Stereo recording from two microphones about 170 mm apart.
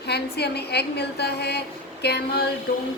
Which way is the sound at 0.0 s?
75° left (ahead or behind).